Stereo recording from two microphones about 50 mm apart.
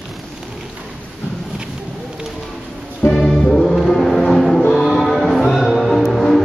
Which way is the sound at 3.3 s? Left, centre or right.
Centre.